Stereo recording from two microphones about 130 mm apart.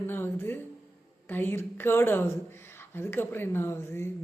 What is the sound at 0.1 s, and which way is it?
Speech, 20° left (ahead or behind).